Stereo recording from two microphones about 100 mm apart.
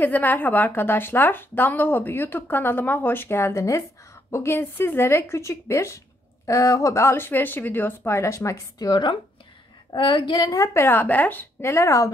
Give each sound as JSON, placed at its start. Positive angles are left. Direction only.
{"t": 0.0, "sound": "speech", "side_deg": 20}